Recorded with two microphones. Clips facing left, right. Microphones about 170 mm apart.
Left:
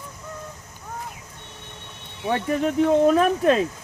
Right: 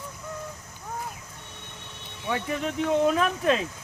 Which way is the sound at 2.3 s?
45° left (ahead or behind).